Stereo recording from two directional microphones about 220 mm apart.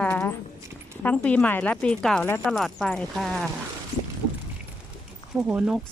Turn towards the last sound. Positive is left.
turn(degrees=-5)  # may be behind; listen again after turning